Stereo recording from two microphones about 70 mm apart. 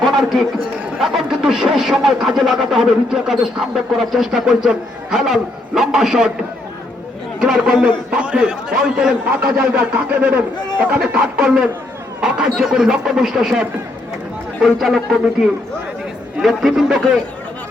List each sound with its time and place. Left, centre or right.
0.0 s a man's voice: centre
7.3 s speech: centre
9.6 s a man's voice: centre